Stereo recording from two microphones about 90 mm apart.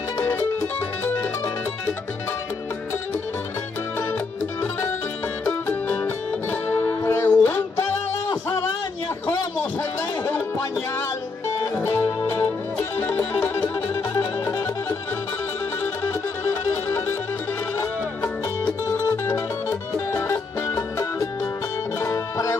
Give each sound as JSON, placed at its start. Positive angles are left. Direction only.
{"t": 0.2, "sound": "music", "side_deg": 25}
{"t": 5.4, "sound": "music", "side_deg": 25}
{"t": 8.3, "sound": "music", "side_deg": 50}
{"t": 11.8, "sound": "music", "side_deg": 40}
{"t": 12.9, "sound": "music", "side_deg": 25}
{"t": 20.1, "sound": "music", "side_deg": 30}